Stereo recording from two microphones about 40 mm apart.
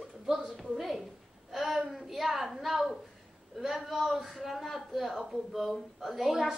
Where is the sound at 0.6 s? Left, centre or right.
Centre.